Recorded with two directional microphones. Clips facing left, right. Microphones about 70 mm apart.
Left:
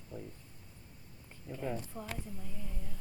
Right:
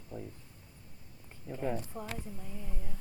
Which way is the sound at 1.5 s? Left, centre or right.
Centre.